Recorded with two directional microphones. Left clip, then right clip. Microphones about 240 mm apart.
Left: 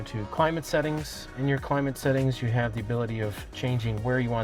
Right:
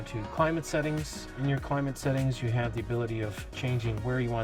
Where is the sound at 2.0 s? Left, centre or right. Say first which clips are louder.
Left 5 dB; left.